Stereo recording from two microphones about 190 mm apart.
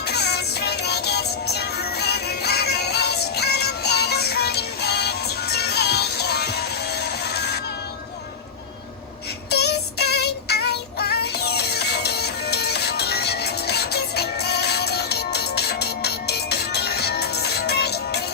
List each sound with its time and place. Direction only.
0.0 s music: 60° left (ahead or behind)
9.5 s music: 60° left (ahead or behind)